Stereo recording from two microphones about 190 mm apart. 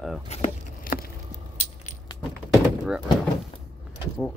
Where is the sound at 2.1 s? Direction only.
20° left (ahead or behind).